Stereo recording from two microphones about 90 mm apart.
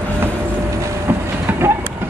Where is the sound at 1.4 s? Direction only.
30° right (ahead or behind).